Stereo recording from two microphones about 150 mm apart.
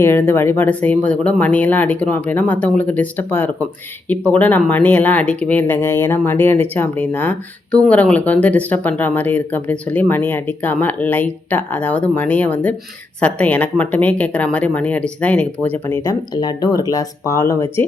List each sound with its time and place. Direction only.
0.0 s speech: 15° left (ahead or behind)
16.0 s speech: 25° left (ahead or behind)